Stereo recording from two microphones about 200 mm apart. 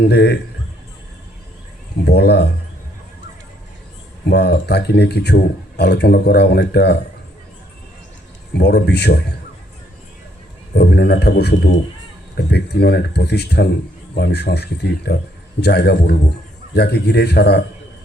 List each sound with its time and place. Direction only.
0.0 s speech: 55° left (ahead or behind)
2.0 s speech: 55° left (ahead or behind)
4.3 s speech: 55° left (ahead or behind)
8.5 s speech: 55° left (ahead or behind)
10.8 s speech: 55° left (ahead or behind)